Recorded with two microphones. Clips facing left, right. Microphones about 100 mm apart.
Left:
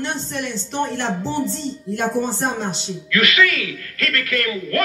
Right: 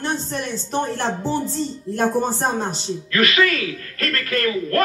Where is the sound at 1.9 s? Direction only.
40° right (ahead or behind).